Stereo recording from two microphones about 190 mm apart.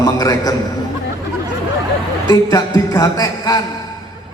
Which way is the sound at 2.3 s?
20° left (ahead or behind).